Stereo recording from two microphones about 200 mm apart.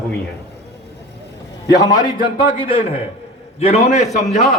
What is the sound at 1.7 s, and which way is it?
A man's voice, 20° left (ahead or behind).